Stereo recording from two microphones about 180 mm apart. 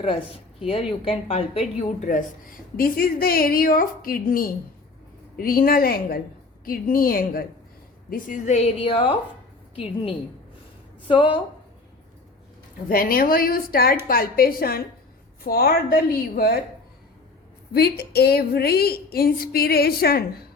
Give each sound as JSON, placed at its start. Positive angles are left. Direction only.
{"t": 0.7, "sound": "a woman's voice", "side_deg": 30}
{"t": 2.1, "sound": "a woman's voice", "side_deg": 45}
{"t": 12.9, "sound": "a woman's voice", "side_deg": 55}
{"t": 17.7, "sound": "a woman's voice", "side_deg": 60}